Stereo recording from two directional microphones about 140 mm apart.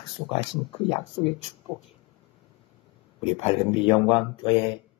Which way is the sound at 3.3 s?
50° left (ahead or behind).